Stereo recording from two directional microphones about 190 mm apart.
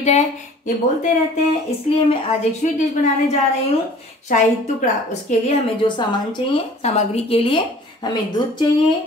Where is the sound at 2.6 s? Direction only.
40° left (ahead or behind).